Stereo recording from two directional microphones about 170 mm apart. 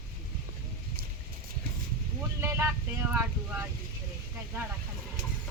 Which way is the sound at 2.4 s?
15° right (ahead or behind).